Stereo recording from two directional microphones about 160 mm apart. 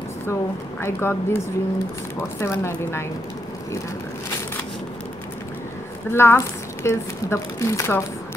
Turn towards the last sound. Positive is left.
turn(degrees=15)  # may be behind; listen again after turning